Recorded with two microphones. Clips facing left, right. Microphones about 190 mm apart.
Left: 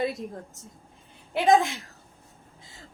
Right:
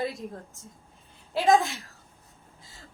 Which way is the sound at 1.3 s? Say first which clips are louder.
Left 1 dB; 20° left (ahead or behind).